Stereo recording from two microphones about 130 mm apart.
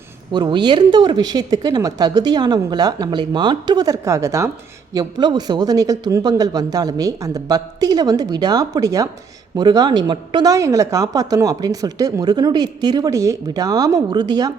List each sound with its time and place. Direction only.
0.3 s speech: 35° right (ahead or behind)
4.9 s speech: 35° right (ahead or behind)